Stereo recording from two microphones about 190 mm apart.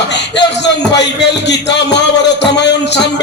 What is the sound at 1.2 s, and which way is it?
Music, 65° left (ahead or behind).